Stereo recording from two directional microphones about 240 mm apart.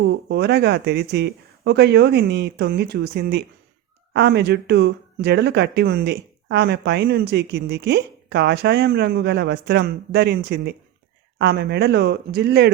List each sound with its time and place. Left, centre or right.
0.0 s speech: right